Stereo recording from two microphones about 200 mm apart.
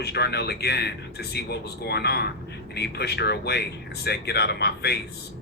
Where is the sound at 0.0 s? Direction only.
55° left (ahead or behind).